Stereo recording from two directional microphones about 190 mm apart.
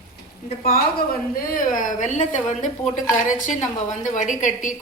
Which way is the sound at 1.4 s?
45° left (ahead or behind).